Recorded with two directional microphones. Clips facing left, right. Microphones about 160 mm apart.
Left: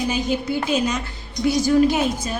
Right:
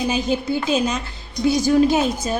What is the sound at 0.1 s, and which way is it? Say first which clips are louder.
A woman's voice: right 1 dB; 30° right (ahead or behind).